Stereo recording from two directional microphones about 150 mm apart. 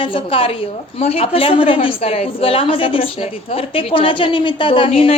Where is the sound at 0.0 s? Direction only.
35° left (ahead or behind).